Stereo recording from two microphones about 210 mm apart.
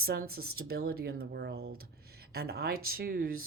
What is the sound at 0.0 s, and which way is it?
Speech, 45° right (ahead or behind).